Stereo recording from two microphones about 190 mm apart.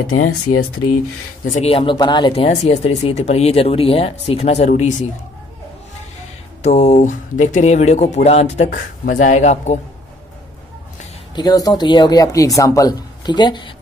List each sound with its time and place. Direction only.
0.0 s speech: 90° left
1.4 s speech: 40° left (ahead or behind)
6.6 s speech: 35° left (ahead or behind)
11.3 s speech: 20° left (ahead or behind)